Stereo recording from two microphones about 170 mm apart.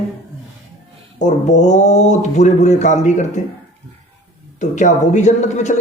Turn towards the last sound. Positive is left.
turn(degrees=45)  # may be behind; listen again after turning